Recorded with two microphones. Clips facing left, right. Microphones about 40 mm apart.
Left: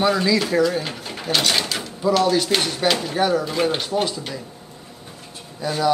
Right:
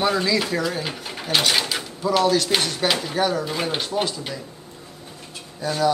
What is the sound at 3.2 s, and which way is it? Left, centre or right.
A man's voice, centre.